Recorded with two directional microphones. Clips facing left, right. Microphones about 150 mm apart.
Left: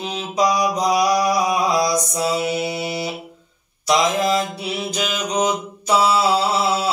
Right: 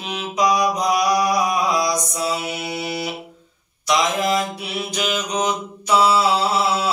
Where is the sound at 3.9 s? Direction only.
30° left (ahead or behind).